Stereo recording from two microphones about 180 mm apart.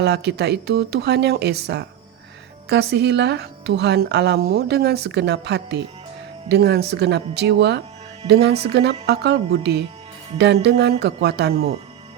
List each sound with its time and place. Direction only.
0.0 s speech: 70° right (ahead or behind)